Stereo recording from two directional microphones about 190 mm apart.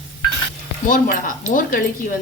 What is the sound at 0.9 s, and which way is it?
Speech, 45° left (ahead or behind).